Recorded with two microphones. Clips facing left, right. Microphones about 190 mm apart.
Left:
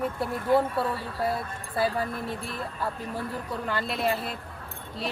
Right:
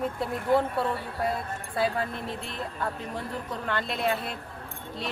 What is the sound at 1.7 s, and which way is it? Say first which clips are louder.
Speech: left 1 dB; 25° right (ahead or behind).